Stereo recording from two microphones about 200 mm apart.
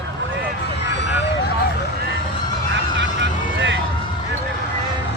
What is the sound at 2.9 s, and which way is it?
Vehicle, 65° right (ahead or behind).